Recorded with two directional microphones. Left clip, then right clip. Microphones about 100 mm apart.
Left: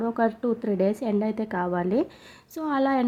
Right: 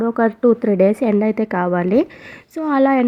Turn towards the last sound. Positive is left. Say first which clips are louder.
# right 9 dB
turn(degrees=-25)  # may be behind; listen again after turning